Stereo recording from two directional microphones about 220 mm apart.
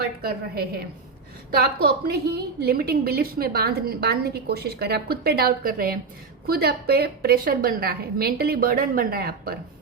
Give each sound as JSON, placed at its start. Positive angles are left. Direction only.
{"t": 0.0, "sound": "a woman's voice", "side_deg": -45}